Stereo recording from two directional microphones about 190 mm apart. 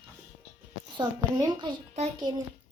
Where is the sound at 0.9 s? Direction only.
20° right (ahead or behind).